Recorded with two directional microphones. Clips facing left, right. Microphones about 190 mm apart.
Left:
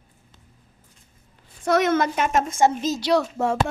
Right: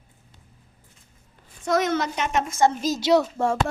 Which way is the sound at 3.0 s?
20° right (ahead or behind).